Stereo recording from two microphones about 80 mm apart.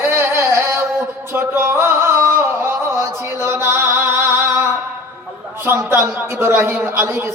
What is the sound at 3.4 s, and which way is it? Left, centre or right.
Singing, right.